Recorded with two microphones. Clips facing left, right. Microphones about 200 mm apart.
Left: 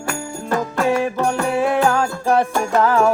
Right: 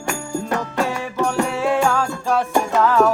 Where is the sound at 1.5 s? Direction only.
15° left (ahead or behind).